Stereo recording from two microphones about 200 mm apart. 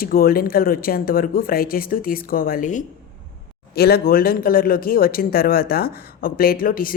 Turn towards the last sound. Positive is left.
turn(degrees=45)  # may be behind; listen again after turning